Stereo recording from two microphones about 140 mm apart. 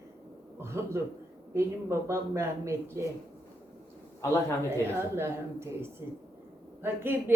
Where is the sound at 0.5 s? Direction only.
20° right (ahead or behind).